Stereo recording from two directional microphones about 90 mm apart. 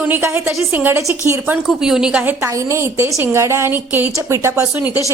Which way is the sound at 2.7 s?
30° right (ahead or behind).